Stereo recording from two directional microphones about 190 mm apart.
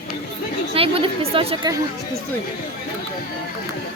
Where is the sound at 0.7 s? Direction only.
30° right (ahead or behind).